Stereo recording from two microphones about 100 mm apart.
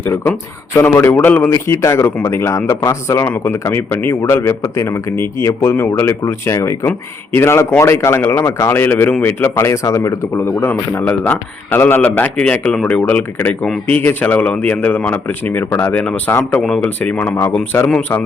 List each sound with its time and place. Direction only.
0.0 s speech: 25° left (ahead or behind)
1.5 s speech: 30° left (ahead or behind)
16.5 s speech: 5° left (ahead or behind)